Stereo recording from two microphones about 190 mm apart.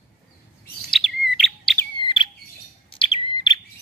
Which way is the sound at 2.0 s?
25° left (ahead or behind).